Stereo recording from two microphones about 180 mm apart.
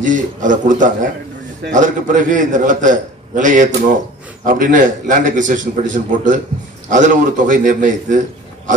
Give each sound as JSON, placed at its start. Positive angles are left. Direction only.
{"t": 0.0, "sound": "a man's voice", "side_deg": -45}